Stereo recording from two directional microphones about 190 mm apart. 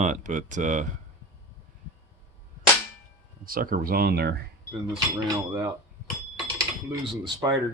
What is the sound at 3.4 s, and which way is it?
Speech, 50° right (ahead or behind).